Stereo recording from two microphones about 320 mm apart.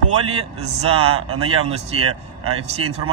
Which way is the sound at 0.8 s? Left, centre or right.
Centre.